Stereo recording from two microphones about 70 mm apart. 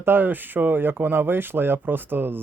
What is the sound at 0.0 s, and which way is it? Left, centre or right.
Speech, right.